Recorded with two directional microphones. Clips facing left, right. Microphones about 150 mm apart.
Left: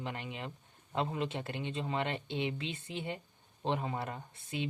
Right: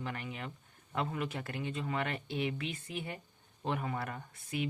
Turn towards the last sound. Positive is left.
turn(degrees=25)  # may be behind; listen again after turning